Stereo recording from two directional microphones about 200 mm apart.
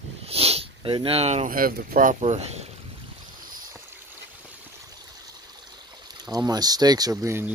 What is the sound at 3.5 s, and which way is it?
Boat, 20° right (ahead or behind).